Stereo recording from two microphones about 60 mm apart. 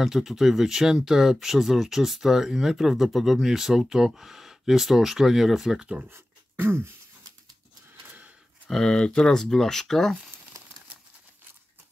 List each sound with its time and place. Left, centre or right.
0.0 s speech: centre
6.0 s beatboxing: right
8.6 s speech: centre